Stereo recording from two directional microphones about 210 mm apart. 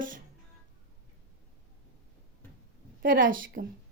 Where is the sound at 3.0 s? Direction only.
40° right (ahead or behind).